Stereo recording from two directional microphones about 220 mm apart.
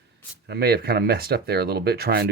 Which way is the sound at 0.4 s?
45° right (ahead or behind).